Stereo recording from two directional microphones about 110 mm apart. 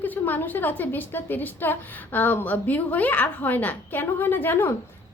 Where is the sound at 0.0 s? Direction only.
15° left (ahead or behind).